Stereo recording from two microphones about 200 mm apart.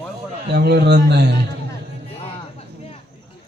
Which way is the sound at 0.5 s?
55° right (ahead or behind).